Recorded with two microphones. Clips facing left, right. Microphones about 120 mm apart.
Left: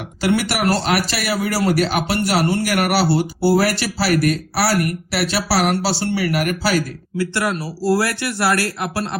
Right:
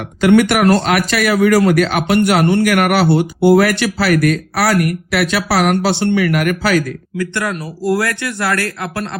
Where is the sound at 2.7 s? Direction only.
50° right (ahead or behind).